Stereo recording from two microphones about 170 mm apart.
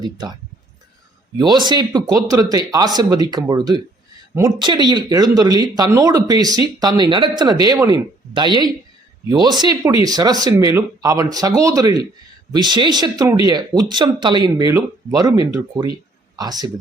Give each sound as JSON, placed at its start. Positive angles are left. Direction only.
{"t": 0.0, "sound": "speech", "side_deg": -25}
{"t": 1.4, "sound": "speech", "side_deg": -25}